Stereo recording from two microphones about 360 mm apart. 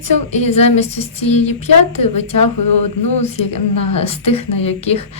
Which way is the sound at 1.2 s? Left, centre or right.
Left.